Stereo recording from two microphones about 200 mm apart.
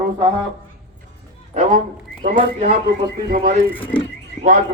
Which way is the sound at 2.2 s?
35° right (ahead or behind).